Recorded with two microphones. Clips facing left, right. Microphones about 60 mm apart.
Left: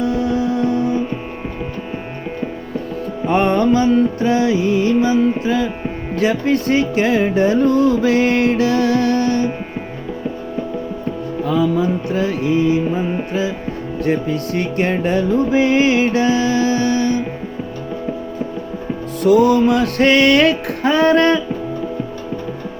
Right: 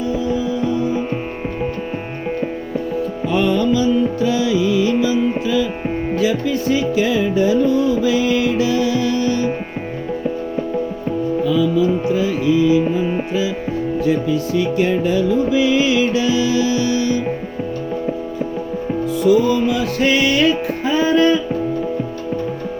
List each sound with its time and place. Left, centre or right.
0.0 s music: left
3.2 s music: left
6.1 s music: left
11.4 s music: left
14.0 s music: left
19.2 s music: left